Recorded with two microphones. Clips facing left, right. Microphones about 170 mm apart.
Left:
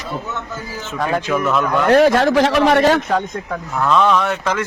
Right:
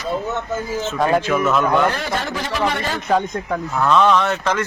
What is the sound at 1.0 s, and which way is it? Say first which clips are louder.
Speech: right 1 dB; 10° right (ahead or behind).